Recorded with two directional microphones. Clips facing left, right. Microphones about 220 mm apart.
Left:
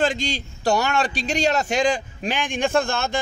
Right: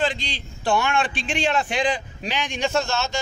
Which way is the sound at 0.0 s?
45° left (ahead or behind).